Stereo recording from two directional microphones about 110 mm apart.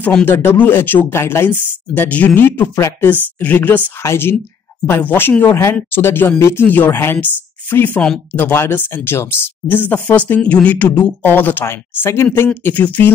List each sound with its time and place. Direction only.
0.2 s speech: 20° left (ahead or behind)